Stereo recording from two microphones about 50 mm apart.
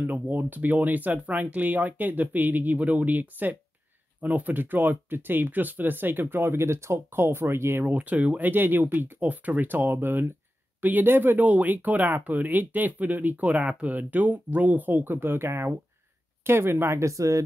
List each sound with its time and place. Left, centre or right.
0.0 s speech: right
7.8 s speech: right
10.8 s speech: right